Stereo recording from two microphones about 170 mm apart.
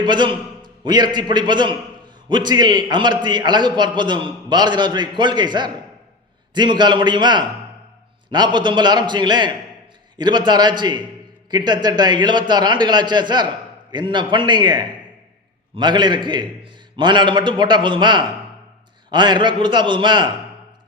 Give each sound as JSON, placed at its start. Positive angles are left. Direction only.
{"t": 0.0, "sound": "a man's voice", "side_deg": -25}